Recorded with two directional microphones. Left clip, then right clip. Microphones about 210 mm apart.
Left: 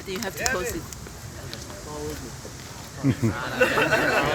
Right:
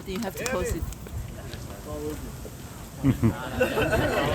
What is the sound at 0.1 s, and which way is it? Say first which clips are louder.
Speech: left 2 dB; 45° right (ahead or behind).